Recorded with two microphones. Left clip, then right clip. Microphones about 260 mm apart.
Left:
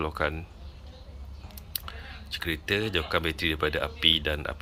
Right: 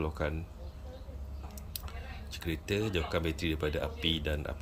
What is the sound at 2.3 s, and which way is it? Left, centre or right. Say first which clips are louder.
Speech: left 7 dB; centre.